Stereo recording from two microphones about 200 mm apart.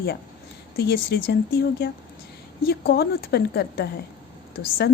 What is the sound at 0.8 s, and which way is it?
Speech, 55° left (ahead or behind).